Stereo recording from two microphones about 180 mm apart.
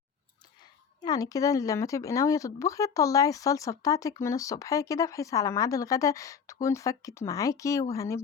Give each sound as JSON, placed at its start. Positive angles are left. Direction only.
{"t": 0.6, "sound": "speech", "side_deg": 20}